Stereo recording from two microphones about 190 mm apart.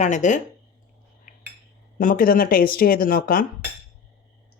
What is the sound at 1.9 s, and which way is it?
Speech, 50° left (ahead or behind).